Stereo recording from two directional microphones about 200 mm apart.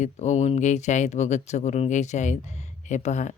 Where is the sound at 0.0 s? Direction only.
35° left (ahead or behind).